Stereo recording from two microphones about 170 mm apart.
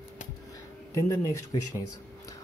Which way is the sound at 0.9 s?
20° left (ahead or behind).